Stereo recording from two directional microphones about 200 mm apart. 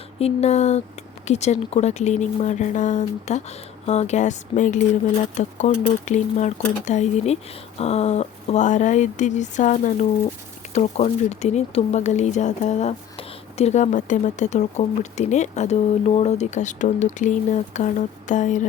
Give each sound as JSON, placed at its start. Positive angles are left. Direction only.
{"t": 0.2, "sound": "speech", "side_deg": 30}